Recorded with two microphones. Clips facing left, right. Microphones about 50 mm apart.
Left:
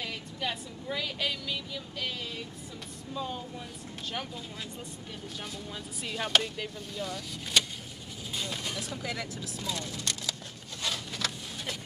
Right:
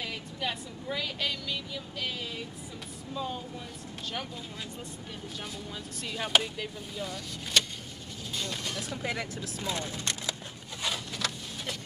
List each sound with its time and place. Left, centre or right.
0.0 s a woman's voice: centre
6.0 s a woman's voice: centre
8.8 s speech: right
10.8 s a sound: centre